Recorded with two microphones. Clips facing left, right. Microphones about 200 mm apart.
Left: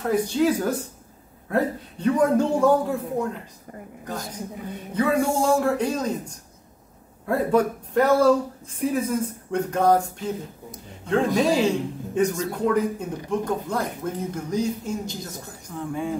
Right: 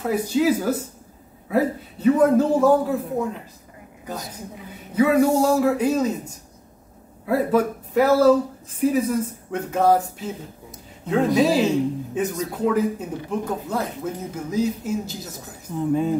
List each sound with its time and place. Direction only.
0.0 s a woman's voice: 5° right (ahead or behind)
15.7 s speech: 20° right (ahead or behind)